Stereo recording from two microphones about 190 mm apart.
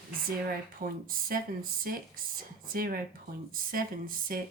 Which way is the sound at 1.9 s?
50° right (ahead or behind).